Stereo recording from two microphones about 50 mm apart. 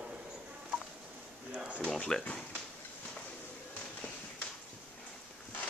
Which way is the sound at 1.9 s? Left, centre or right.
Centre.